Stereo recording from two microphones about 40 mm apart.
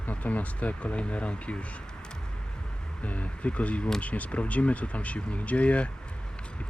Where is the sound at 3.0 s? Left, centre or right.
Left.